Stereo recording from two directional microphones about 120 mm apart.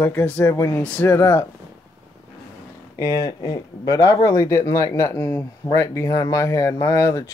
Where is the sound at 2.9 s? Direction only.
30° left (ahead or behind).